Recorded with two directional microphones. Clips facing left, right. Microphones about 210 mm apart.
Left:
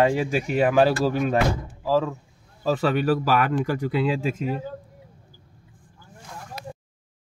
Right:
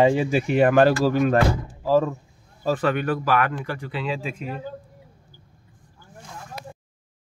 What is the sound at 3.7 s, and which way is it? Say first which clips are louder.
Speech: left 5 dB; 40° left (ahead or behind).